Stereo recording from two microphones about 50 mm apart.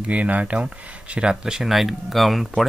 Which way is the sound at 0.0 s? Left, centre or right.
Right.